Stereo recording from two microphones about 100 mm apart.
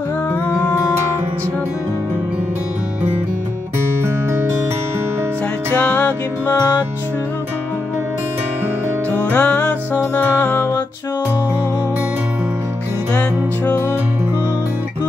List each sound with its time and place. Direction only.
0.5 s music: 20° left (ahead or behind)
4.0 s music: 25° right (ahead or behind)
5.7 s music: 15° left (ahead or behind)
9.2 s music: 15° left (ahead or behind)